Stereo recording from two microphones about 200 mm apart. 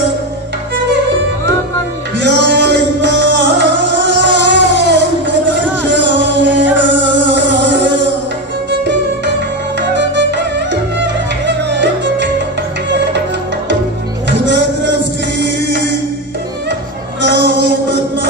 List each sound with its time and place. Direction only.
2.1 s music: 60° right (ahead or behind)
5.9 s music: 65° right (ahead or behind)
9.8 s music: 60° right (ahead or behind)
14.4 s music: 65° right (ahead or behind)
17.2 s music: 60° right (ahead or behind)